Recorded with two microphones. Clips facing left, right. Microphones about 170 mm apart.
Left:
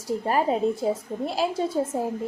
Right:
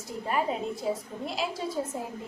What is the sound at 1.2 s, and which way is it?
Speech, 35° left (ahead or behind).